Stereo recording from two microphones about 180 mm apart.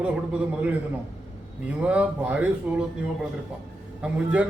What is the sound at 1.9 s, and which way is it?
Speech, 5° right (ahead or behind).